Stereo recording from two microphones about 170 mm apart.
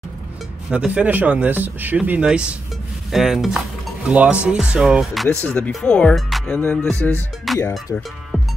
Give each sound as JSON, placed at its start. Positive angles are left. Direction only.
{"t": 0.7, "sound": "speech", "side_deg": -5}
{"t": 3.1, "sound": "cutlery", "side_deg": 0}
{"t": 4.5, "sound": "speech", "side_deg": -5}